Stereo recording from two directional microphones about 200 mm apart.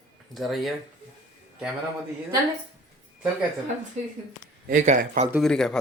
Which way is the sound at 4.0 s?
35° right (ahead or behind).